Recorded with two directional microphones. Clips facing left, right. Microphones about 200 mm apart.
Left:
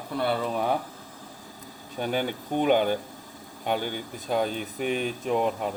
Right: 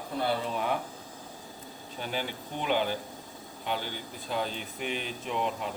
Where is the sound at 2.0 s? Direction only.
50° left (ahead or behind).